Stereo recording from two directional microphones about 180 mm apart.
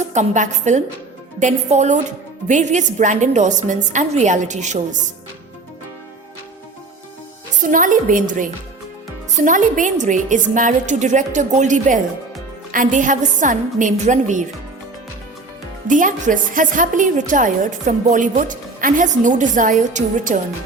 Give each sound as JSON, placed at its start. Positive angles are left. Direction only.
{"t": 0.0, "sound": "a woman's voice", "side_deg": -40}
{"t": 7.6, "sound": "a woman's voice", "side_deg": -45}
{"t": 15.9, "sound": "a woman's voice", "side_deg": -45}